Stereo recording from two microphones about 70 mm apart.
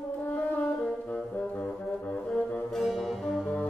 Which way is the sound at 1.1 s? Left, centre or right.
Left.